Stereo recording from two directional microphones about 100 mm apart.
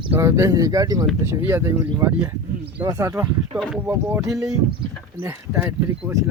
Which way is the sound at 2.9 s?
35° right (ahead or behind).